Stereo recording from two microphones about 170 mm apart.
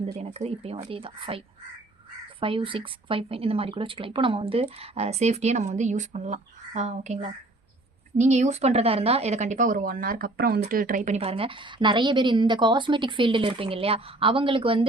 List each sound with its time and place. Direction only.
0.0 s a woman's voice: 40° right (ahead or behind)
2.4 s a woman's voice: 30° right (ahead or behind)